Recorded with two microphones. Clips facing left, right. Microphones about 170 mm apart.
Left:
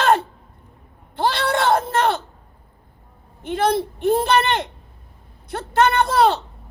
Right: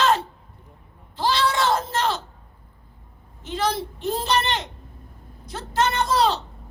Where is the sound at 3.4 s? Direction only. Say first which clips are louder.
Left 5 dB; 55° left (ahead or behind).